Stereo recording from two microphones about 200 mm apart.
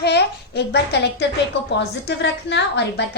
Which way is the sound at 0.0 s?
55° left (ahead or behind).